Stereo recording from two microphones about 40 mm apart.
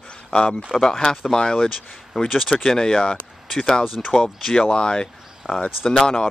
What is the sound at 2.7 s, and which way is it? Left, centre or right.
Speech, centre.